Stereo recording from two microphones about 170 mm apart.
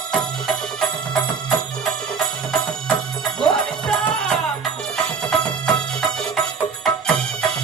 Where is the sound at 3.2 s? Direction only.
5° left (ahead or behind).